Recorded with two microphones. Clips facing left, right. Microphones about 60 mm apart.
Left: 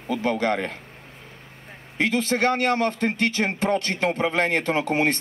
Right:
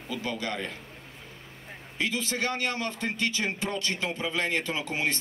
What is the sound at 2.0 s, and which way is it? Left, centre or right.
Speech, left.